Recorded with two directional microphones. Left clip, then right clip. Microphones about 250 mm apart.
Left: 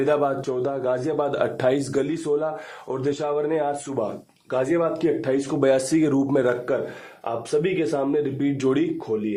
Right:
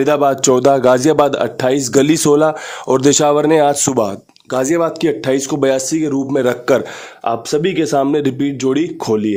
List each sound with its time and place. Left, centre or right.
0.0 s speech: right
1.3 s speech: right
6.4 s speech: right
7.3 s speech: right
8.4 s speech: right
9.0 s speech: right